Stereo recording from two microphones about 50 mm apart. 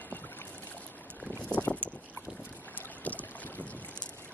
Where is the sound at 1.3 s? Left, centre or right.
Left.